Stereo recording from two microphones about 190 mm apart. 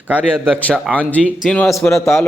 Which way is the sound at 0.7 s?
5° left (ahead or behind).